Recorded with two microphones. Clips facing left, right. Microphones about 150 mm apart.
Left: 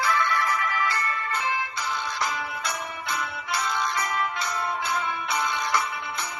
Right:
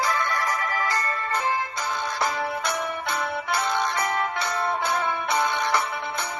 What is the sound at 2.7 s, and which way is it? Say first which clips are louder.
Music: right 4 dB; 60° right (ahead or behind).